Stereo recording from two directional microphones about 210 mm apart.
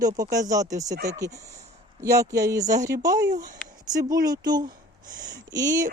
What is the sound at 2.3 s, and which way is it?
Speech, 15° right (ahead or behind).